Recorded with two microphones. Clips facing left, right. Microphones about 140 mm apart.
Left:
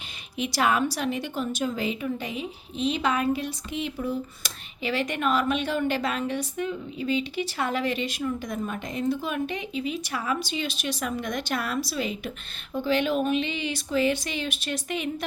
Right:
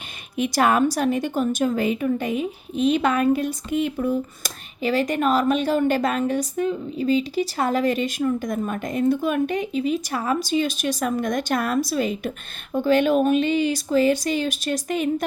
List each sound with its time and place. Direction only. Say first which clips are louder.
0.3 s a woman's voice: right 5 dB; 50° right (ahead or behind)